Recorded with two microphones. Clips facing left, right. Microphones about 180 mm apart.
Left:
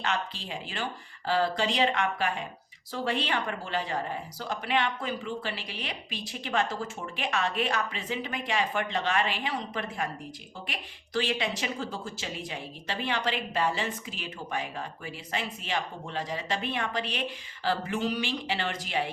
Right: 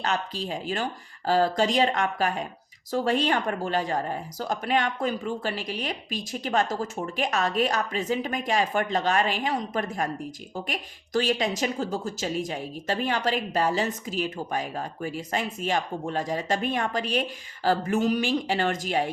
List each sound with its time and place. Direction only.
0.0 s speech: 40° right (ahead or behind)